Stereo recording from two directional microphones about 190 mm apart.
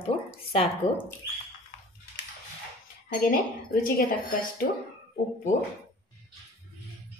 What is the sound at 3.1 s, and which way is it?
Speech, 50° left (ahead or behind).